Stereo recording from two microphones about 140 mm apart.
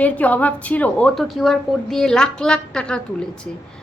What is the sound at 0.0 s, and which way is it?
A woman's voice, 10° left (ahead or behind).